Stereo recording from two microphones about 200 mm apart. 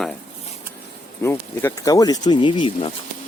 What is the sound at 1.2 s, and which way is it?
Speech, 15° left (ahead or behind).